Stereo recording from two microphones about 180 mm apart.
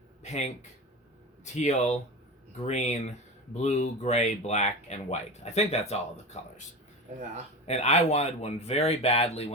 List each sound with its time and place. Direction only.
0.2 s speech: 40° left (ahead or behind)
1.5 s speech: 40° left (ahead or behind)
7.7 s speech: 40° left (ahead or behind)